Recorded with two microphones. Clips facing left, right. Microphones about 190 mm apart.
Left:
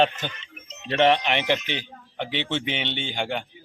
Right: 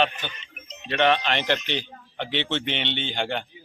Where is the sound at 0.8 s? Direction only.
30° left (ahead or behind).